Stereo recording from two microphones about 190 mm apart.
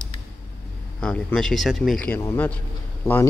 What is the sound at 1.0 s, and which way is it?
A man's voice, 5° left (ahead or behind).